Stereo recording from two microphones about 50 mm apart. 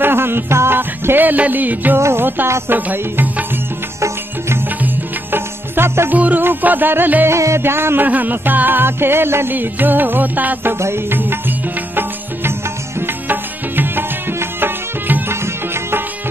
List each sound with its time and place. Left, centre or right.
0.0 s music: right
0.7 s music: right
2.0 s music: right
2.7 s music: right
4.8 s music: right
6.1 s music: right
7.2 s music: right
7.6 s a sound: right
8.0 s music: right
9.5 s music: right
10.8 s music: right
11.1 s music: right
15.2 s music: right